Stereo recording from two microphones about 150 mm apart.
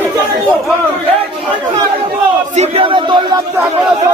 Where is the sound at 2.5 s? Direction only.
45° right (ahead or behind).